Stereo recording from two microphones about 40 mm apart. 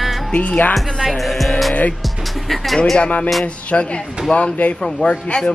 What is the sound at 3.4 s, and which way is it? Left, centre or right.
Speech, left.